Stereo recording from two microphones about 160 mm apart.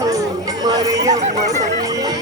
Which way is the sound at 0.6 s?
25° right (ahead or behind).